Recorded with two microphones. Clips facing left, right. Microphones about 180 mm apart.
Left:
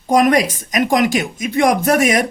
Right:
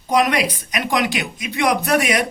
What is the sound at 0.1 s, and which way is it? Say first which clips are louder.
Speech: left 5 dB; 45° left (ahead or behind).